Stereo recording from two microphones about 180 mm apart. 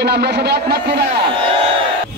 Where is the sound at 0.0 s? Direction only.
65° right (ahead or behind).